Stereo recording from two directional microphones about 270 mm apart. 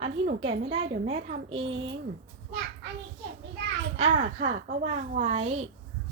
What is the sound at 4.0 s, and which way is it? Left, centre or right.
A woman's voice, right.